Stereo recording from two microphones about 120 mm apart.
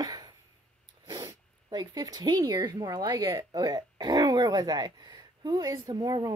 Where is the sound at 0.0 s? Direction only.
35° right (ahead or behind).